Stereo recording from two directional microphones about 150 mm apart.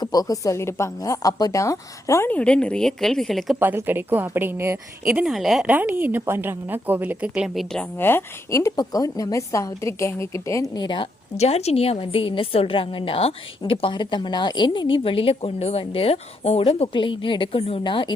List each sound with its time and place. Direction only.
0.0 s a woman's voice: 25° left (ahead or behind); by 3.6 s centre (ahead or behind)
3.6 s a woman's voice: 15° right (ahead or behind)
5.0 s a woman's voice: 5° right (ahead or behind)
7.9 s a woman's voice: 15° left (ahead or behind); by 11.1 s 30° left (ahead or behind)
11.3 s a woman's voice: 45° left (ahead or behind)